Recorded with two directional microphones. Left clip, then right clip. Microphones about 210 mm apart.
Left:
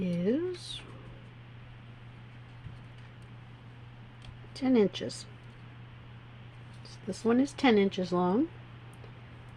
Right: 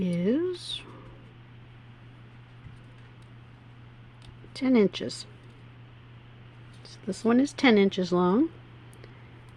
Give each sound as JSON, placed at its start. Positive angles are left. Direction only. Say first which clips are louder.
{"t": 0.0, "sound": "a sound", "louder": "right 3 dB", "side_deg": -40}
{"t": 4.5, "sound": "speech", "louder": "right 3 dB", "side_deg": -45}
{"t": 7.1, "sound": "speech", "louder": "right 3 dB", "side_deg": -45}